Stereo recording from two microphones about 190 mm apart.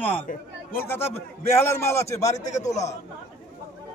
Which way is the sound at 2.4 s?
40° left (ahead or behind).